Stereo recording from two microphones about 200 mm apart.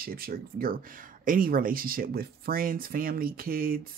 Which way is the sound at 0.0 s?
45° right (ahead or behind).